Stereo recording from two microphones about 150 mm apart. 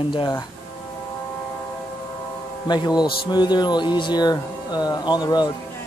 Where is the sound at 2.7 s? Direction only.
30° left (ahead or behind).